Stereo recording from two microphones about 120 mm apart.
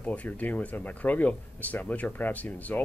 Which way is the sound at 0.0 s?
10° left (ahead or behind).